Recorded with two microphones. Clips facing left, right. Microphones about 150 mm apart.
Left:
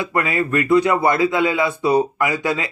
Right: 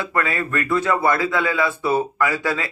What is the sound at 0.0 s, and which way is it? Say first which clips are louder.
A man's voice: left 3 dB; 20° left (ahead or behind).